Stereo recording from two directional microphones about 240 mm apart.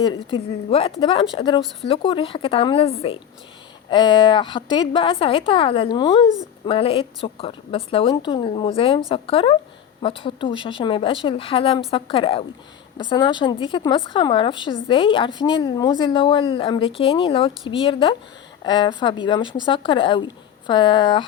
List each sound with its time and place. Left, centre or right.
0.3 s a woman's voice: left